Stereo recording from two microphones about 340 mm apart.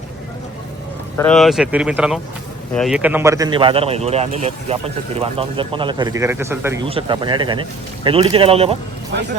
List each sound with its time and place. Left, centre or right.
1.1 s speech: centre